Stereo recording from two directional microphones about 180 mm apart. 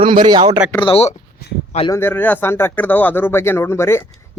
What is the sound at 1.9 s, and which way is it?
Speech, 10° left (ahead or behind).